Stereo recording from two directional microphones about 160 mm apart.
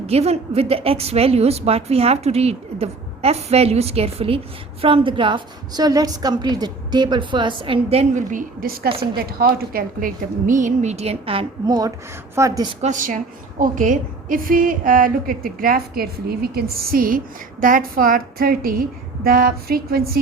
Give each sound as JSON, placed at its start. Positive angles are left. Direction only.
{"t": 0.1, "sound": "a woman's voice", "side_deg": -40}
{"t": 8.3, "sound": "a woman's voice", "side_deg": -60}
{"t": 11.6, "sound": "a woman's voice", "side_deg": -25}
{"t": 12.8, "sound": "a woman's voice", "side_deg": -55}